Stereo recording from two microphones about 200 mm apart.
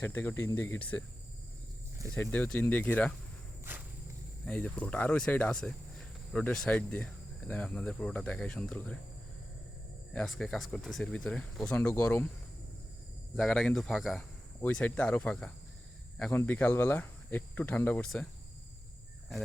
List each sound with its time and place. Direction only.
0.0 s speech: 10° left (ahead or behind)
2.1 s speech: 10° left (ahead or behind)
3.6 s walk: 10° right (ahead or behind)
4.4 s speech: 5° left (ahead or behind)
10.1 s speech: 5° left (ahead or behind)
13.3 s speech: 5° left (ahead or behind)